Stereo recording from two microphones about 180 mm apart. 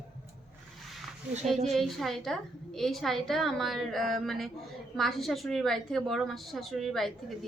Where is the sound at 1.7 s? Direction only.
Centre (ahead or behind).